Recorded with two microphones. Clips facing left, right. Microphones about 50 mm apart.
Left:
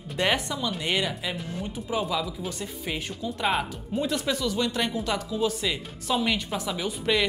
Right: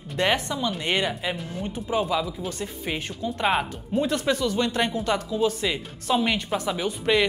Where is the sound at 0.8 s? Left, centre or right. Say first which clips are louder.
Right 2 dB; centre.